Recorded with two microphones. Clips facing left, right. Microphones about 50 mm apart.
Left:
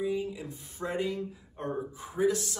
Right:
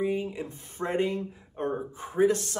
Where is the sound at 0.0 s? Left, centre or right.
Right.